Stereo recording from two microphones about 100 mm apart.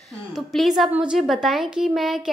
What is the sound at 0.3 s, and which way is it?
A woman's voice, centre (ahead or behind).